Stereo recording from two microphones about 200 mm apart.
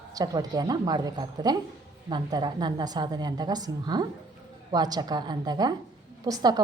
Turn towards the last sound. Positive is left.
turn(degrees=-20)  # may be behind; listen again after turning